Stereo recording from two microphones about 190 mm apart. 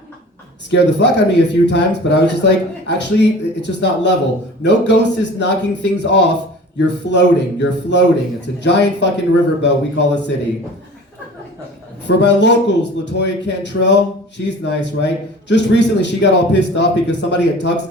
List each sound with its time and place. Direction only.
0.7 s speech: 65° left (ahead or behind)
12.0 s speech: 65° left (ahead or behind)